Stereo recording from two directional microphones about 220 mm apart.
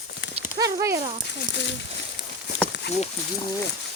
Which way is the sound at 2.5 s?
55° left (ahead or behind).